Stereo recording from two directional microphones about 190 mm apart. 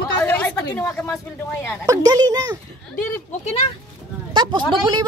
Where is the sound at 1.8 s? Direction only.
20° right (ahead or behind).